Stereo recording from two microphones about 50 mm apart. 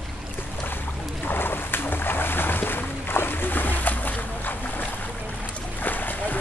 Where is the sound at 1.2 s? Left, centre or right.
Left.